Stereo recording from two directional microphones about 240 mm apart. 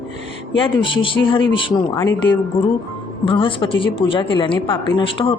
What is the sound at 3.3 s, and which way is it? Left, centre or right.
Speech, left.